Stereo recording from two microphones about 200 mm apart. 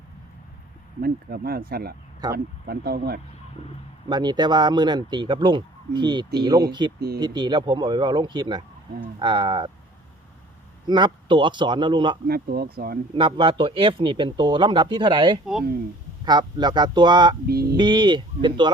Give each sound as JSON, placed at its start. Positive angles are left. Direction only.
{"t": 1.0, "sound": "speech", "side_deg": -50}
{"t": 4.1, "sound": "speech", "side_deg": -20}
{"t": 10.8, "sound": "speech", "side_deg": -20}
{"t": 12.3, "sound": "speech", "side_deg": -50}
{"t": 13.1, "sound": "speech", "side_deg": -25}
{"t": 17.5, "sound": "speech", "side_deg": -50}
{"t": 17.7, "sound": "speech", "side_deg": -25}